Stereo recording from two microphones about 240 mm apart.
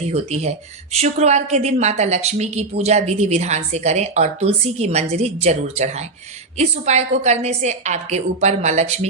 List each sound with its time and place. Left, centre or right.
0.0 s a woman's voice: right